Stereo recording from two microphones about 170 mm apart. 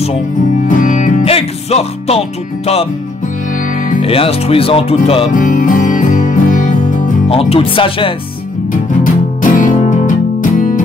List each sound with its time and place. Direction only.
0.7 s music: 50° left (ahead or behind)
1.2 s music: 35° left (ahead or behind)
4.0 s speech: 35° left (ahead or behind)
5.3 s music: 50° left (ahead or behind)
7.2 s speech: 35° left (ahead or behind)
9.0 s music: 50° left (ahead or behind)